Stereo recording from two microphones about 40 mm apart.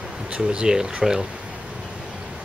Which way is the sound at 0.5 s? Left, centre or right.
Right.